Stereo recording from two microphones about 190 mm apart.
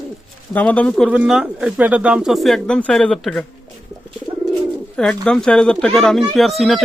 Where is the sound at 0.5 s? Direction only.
5° left (ahead or behind).